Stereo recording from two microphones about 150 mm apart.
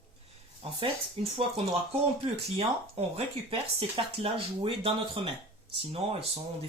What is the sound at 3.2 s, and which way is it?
Speech, 40° right (ahead or behind).